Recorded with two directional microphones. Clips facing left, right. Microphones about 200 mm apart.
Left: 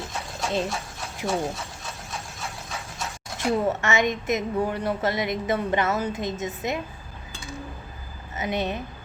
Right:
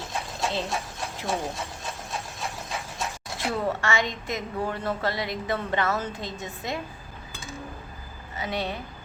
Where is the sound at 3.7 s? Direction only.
20° left (ahead or behind).